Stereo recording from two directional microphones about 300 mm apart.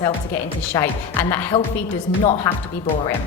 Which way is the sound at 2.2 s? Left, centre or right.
Centre.